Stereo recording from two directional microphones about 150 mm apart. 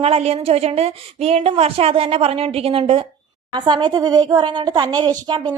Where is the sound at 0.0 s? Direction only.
40° right (ahead or behind).